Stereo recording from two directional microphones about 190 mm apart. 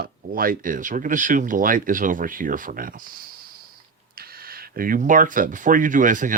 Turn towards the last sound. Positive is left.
turn(degrees=-45)  # may be behind; listen again after turning